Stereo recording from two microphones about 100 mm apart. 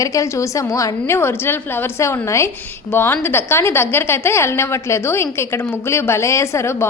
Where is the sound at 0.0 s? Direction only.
35° left (ahead or behind).